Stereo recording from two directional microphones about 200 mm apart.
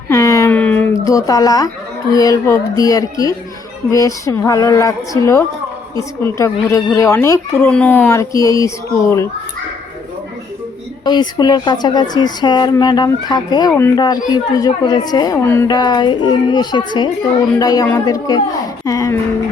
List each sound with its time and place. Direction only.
0.1 s a sound: 15° left (ahead or behind)
2.1 s speech: 15° left (ahead or behind)
11.0 s a woman's voice: 20° left (ahead or behind)